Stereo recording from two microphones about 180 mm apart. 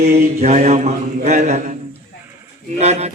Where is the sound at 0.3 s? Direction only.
40° right (ahead or behind).